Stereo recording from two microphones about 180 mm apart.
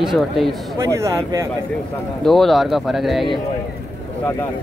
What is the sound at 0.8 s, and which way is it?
Speech, 15° right (ahead or behind).